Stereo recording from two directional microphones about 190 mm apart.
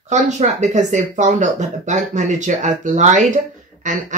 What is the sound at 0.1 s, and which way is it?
Speech, 40° right (ahead or behind).